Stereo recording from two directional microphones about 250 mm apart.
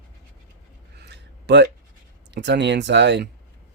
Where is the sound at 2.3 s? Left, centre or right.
Right.